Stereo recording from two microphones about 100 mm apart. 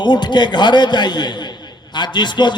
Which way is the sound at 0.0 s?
50° left (ahead or behind).